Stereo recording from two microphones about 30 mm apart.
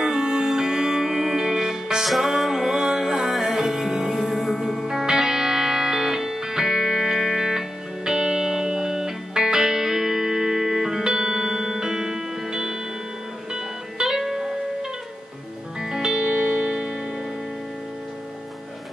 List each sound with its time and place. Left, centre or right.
0.0 s music: right; by 4.7 s centre
5.0 s music: centre